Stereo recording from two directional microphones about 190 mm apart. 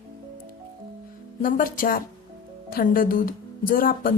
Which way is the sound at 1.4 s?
45° left (ahead or behind).